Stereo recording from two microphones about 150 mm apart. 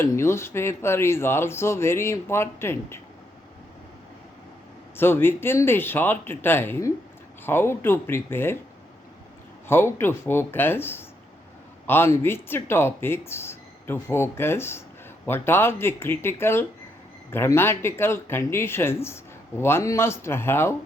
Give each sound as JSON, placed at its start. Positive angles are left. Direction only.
{"t": 0.0, "sound": "speech", "side_deg": 15}
{"t": 4.9, "sound": "speech", "side_deg": 15}
{"t": 9.6, "sound": "speech", "side_deg": 15}